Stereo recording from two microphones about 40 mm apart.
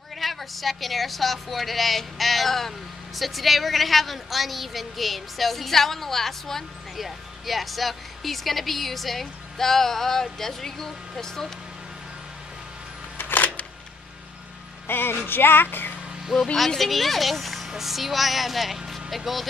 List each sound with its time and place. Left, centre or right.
0.2 s speech: centre
13.2 s camera: left
14.9 s music: left
16.5 s speech: centre
18.9 s vehicle: centre